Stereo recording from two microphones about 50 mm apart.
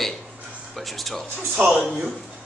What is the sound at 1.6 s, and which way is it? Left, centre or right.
Speech, right.